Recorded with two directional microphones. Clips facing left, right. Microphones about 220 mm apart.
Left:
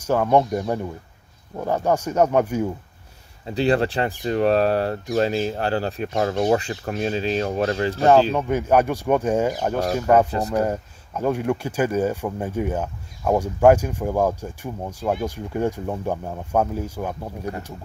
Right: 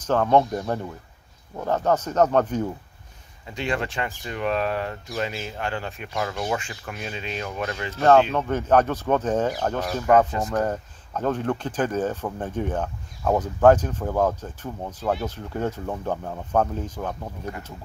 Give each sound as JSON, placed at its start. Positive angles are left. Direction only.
{"t": 0.0, "sound": "speech", "side_deg": 10}
{"t": 3.4, "sound": "speech", "side_deg": 35}
{"t": 8.4, "sound": "speech", "side_deg": 10}